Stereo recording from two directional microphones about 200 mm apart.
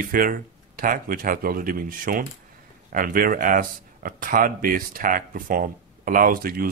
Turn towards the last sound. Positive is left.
turn(degrees=-45)  # may be behind; listen again after turning